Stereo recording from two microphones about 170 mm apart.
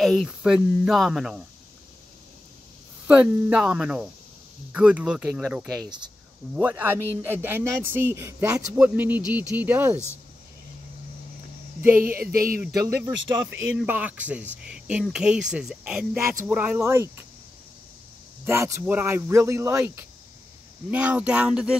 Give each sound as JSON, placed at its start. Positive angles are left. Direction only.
{"t": 0.0, "sound": "speech", "side_deg": 0}
{"t": 3.1, "sound": "speech", "side_deg": -5}
{"t": 5.9, "sound": "speech", "side_deg": -25}
{"t": 6.5, "sound": "a man's voice", "side_deg": -10}
{"t": 11.8, "sound": "a man's voice", "side_deg": -15}
{"t": 12.2, "sound": "a sound", "side_deg": -60}
{"t": 12.5, "sound": "a man's voice", "side_deg": -15}
{"t": 18.4, "sound": "a man's voice", "side_deg": -15}